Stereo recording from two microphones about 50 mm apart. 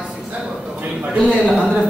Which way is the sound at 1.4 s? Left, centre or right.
Centre.